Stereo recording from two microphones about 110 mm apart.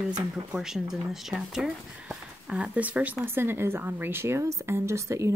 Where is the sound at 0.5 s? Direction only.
5° right (ahead or behind).